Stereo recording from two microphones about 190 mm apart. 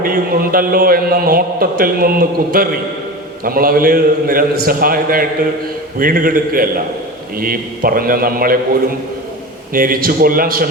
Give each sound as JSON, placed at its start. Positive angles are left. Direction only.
{"t": 0.0, "sound": "a man's voice", "side_deg": -50}
{"t": 9.7, "sound": "a man's voice", "side_deg": -50}